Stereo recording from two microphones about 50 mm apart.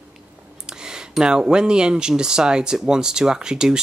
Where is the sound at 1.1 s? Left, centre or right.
Centre.